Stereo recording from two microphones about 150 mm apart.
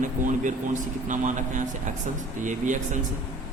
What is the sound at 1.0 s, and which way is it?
Speech, 55° right (ahead or behind).